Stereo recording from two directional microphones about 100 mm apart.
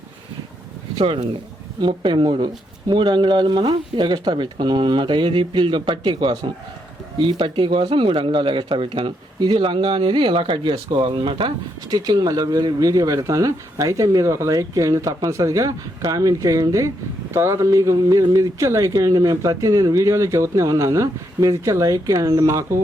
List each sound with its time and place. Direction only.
0.9 s speech: 65° right (ahead or behind)
1.8 s speech: 55° right (ahead or behind)
9.4 s speech: 50° right (ahead or behind)
9.6 s speech: 65° right (ahead or behind)
11.9 s speech: 40° right (ahead or behind)